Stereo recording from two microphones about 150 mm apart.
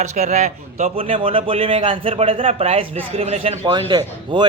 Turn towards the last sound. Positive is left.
turn(degrees=-30)  # may be behind; listen again after turning